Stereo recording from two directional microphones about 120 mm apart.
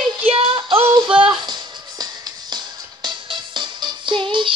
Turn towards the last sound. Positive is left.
turn(degrees=-45)  # may be behind; listen again after turning